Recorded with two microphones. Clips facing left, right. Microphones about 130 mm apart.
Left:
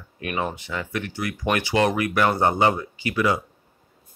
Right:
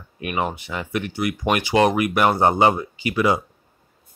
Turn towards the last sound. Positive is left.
turn(degrees=-15)  # may be behind; listen again after turning